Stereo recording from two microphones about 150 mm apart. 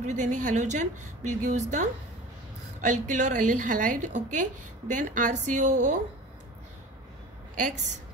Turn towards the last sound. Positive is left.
turn(degrees=-60)  # may be behind; listen again after turning